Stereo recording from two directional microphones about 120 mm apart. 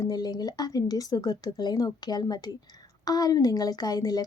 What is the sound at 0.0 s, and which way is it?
A woman's voice, 35° left (ahead or behind).